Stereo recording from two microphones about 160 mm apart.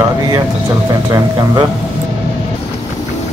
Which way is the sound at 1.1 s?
25° right (ahead or behind).